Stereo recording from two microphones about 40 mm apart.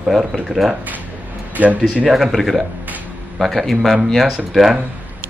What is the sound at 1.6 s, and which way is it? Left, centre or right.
Speech, right.